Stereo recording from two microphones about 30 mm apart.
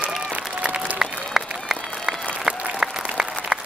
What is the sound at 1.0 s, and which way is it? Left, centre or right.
Applause, centre.